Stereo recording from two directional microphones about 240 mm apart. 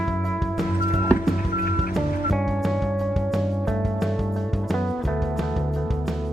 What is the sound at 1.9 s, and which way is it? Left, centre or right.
Music, centre.